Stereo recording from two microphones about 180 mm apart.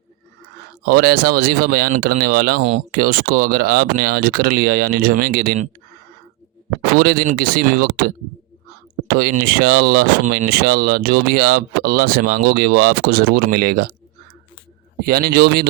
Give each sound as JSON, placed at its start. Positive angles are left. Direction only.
{"t": 0.9, "sound": "speech", "side_deg": -55}
{"t": 7.0, "sound": "speech", "side_deg": -55}
{"t": 15.0, "sound": "speech", "side_deg": -60}